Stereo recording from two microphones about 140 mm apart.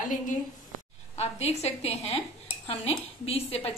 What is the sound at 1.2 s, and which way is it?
A woman's voice, 50° left (ahead or behind).